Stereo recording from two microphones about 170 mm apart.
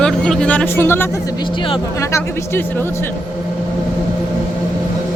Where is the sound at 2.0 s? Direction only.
15° left (ahead or behind).